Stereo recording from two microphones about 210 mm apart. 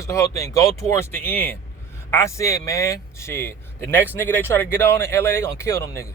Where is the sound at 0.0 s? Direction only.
15° left (ahead or behind).